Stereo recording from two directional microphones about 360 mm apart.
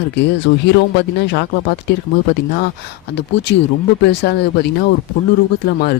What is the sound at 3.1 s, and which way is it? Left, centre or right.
Speech, left.